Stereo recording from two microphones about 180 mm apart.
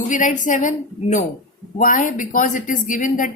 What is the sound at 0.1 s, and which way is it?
A woman's voice, 45° left (ahead or behind).